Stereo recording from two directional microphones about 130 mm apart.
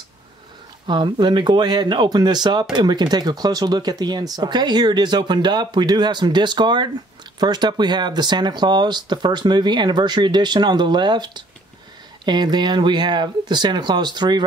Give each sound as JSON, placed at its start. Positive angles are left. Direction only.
{"t": 0.8, "sound": "speech", "side_deg": -35}